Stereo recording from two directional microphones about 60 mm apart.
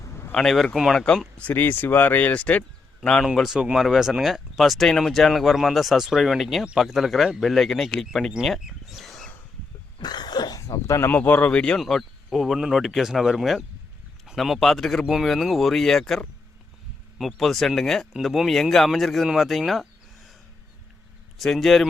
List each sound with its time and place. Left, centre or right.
0.3 s speech: centre
0.9 s speech: centre
1.5 s a man's voice: left; by 3.2 s centre
3.2 s speech: centre
8.6 s bird: centre
10.5 s a sound: left
11.1 s speech: left
11.4 s speech: centre
11.8 s speech: centre
18.1 s speech: centre
21.3 s speech: centre